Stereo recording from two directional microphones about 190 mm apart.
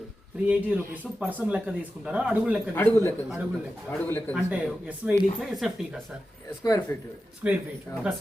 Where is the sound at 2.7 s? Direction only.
10° left (ahead or behind).